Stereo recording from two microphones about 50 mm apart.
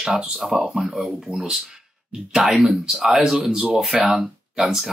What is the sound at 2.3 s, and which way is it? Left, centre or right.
Speech, centre.